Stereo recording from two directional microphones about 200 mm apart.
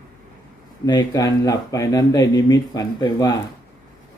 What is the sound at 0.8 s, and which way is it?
Speech, 20° left (ahead or behind).